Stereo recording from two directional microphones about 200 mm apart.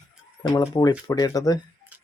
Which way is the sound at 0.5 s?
15° left (ahead or behind).